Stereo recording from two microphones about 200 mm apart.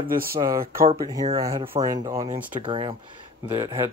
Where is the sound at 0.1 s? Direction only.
45° right (ahead or behind).